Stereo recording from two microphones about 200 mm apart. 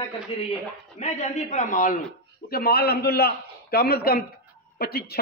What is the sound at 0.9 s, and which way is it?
A man's voice, 35° left (ahead or behind).